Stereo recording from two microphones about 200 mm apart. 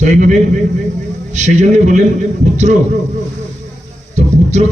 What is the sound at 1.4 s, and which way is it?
Speech, 35° right (ahead or behind).